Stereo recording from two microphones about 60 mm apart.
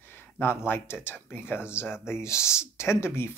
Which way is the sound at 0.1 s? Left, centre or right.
Left.